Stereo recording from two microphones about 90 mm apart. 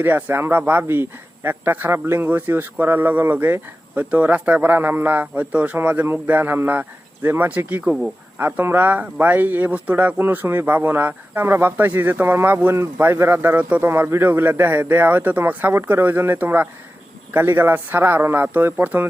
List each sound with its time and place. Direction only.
0.0 s speech: 20° right (ahead or behind)